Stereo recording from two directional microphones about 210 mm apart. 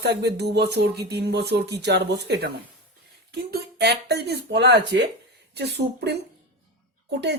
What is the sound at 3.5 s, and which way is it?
Speech, 50° right (ahead or behind).